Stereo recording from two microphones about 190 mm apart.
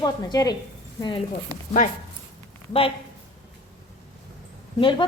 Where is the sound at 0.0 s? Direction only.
20° left (ahead or behind).